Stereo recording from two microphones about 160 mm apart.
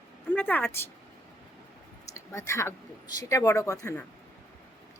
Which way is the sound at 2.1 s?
20° left (ahead or behind).